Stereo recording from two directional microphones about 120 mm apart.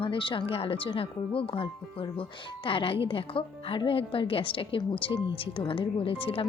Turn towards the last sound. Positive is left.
turn(degrees=50)  # may be behind; listen again after turning